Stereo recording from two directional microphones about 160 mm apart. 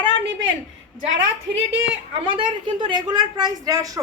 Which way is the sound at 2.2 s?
30° right (ahead or behind).